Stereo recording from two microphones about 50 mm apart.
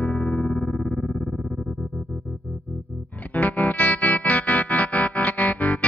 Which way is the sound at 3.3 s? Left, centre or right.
Left.